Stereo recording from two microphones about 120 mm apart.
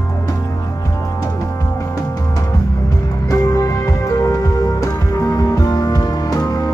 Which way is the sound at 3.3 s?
30° left (ahead or behind).